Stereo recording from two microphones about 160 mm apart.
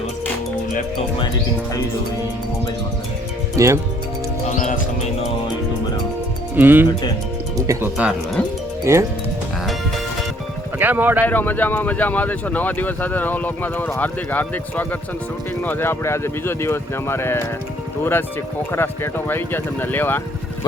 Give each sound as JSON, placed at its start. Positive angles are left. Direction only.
{"t": 3.6, "sound": "speech", "side_deg": -20}
{"t": 4.5, "sound": "music", "side_deg": 50}
{"t": 6.6, "sound": "speech", "side_deg": -10}
{"t": 7.9, "sound": "speech", "side_deg": -5}
{"t": 8.8, "sound": "speech", "side_deg": -15}
{"t": 10.8, "sound": "speech", "side_deg": -10}
{"t": 11.3, "sound": "speech", "side_deg": 10}